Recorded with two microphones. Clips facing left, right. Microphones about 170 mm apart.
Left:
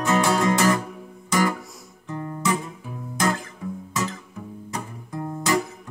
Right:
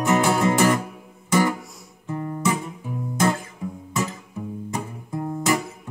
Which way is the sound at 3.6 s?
20° right (ahead or behind).